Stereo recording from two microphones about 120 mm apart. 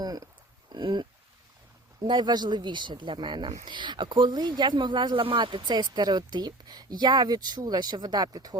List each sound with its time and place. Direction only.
0.0 s a sound: 30° right (ahead or behind)
0.7 s speech: 40° right (ahead or behind)
2.0 s speech: 35° right (ahead or behind)